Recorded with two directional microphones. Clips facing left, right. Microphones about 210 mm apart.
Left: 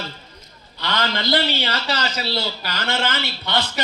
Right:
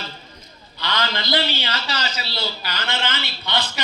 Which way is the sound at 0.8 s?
50° left (ahead or behind).